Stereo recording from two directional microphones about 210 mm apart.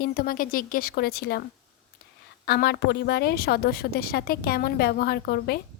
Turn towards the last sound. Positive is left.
turn(degrees=50)  # may be behind; listen again after turning